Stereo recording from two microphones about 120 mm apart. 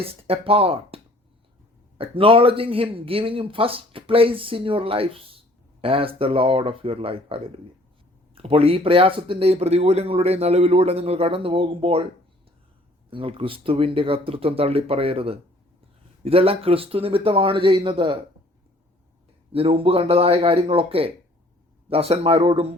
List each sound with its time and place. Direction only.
0.0 s speech: 50° right (ahead or behind)
13.1 s speech: 50° right (ahead or behind)
19.5 s speech: 50° right (ahead or behind)